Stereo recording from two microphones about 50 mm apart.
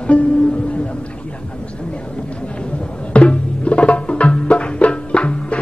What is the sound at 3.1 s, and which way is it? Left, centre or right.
Music, left.